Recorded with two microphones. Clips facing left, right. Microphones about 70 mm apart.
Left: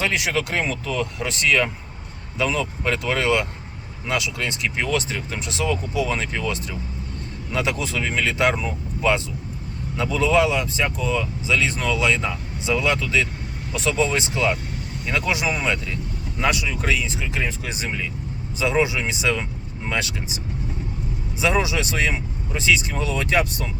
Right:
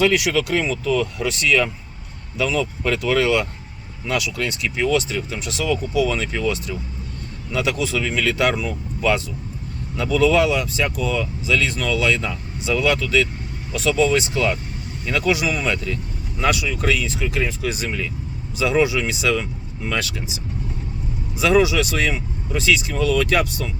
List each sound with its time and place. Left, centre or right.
0.0 s speech: left